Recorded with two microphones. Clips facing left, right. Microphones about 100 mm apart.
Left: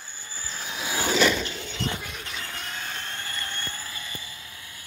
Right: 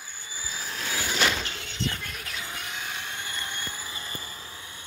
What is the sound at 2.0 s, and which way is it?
Vehicle, centre (ahead or behind).